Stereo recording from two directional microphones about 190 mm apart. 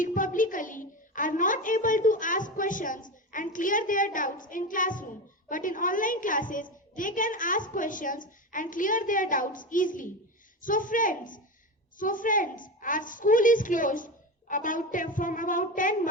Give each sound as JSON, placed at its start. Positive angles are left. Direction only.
{"t": 0.0, "sound": "a woman's voice", "side_deg": 45}